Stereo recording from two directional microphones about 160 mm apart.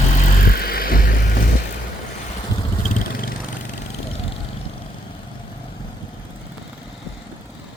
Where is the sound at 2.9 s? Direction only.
65° left (ahead or behind).